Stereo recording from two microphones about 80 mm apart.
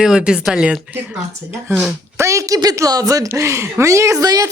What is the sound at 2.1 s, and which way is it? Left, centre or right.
Speech, right.